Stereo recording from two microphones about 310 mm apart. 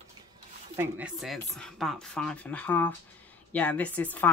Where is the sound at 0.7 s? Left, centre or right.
Centre.